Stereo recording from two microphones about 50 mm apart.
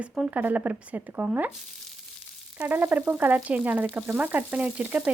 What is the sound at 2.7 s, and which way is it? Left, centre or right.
Speech, right.